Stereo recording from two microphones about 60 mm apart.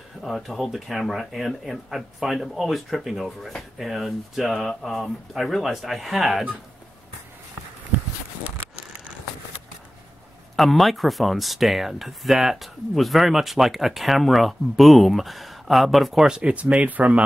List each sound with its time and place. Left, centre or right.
0.2 s speech: centre
7.9 s walk: right
10.5 s speech: centre; by 17.2 s right